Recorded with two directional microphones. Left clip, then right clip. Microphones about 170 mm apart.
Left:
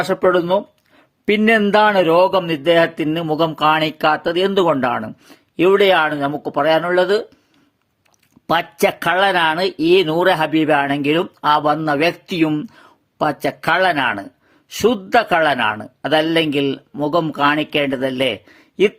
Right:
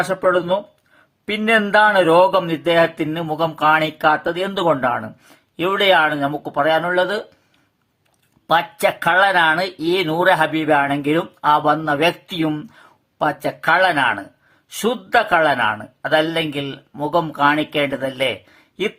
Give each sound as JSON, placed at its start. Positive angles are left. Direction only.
{"t": 0.0, "sound": "speech", "side_deg": 40}
{"t": 1.6, "sound": "speech", "side_deg": 40}
{"t": 8.4, "sound": "speech", "side_deg": 45}